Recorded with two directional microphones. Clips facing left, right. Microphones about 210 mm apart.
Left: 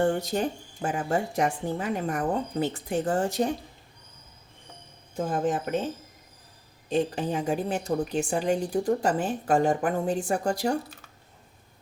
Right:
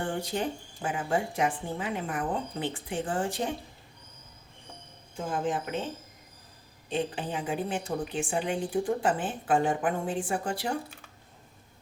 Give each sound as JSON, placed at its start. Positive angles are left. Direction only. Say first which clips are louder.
{"t": 0.0, "sound": "a woman's voice", "louder": "left 6 dB", "side_deg": 40}
{"t": 5.1, "sound": "a woman's voice", "louder": "left 4 dB", "side_deg": 45}
{"t": 6.9, "sound": "a woman's voice", "louder": "left 5 dB", "side_deg": 40}